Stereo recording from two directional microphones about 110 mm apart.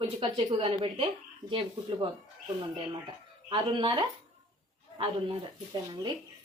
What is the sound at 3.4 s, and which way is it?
Speech, 50° right (ahead or behind).